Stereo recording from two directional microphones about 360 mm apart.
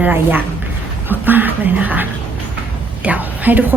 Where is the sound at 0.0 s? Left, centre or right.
Centre.